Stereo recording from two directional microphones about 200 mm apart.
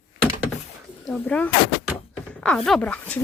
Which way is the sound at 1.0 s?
5° left (ahead or behind).